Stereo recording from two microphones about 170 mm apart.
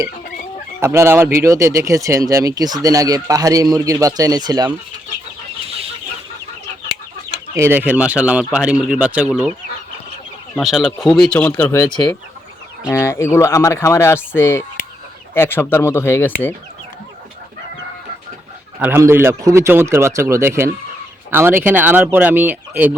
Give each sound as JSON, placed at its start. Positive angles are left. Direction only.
{"t": 0.8, "sound": "speech", "side_deg": -15}
{"t": 7.5, "sound": "speech", "side_deg": -15}
{"t": 10.5, "sound": "speech", "side_deg": 0}
{"t": 18.8, "sound": "speech", "side_deg": -15}